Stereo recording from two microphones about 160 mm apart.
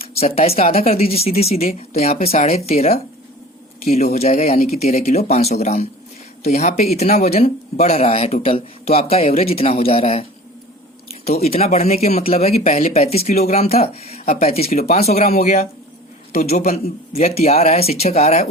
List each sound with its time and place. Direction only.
0.0 s speech: 40° left (ahead or behind)
11.4 s speech: 40° left (ahead or behind)
15.4 s speech: 50° left (ahead or behind)